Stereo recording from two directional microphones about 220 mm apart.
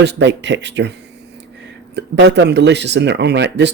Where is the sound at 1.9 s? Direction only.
50° right (ahead or behind).